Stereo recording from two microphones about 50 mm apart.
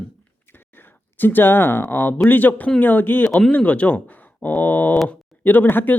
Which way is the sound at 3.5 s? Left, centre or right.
Left.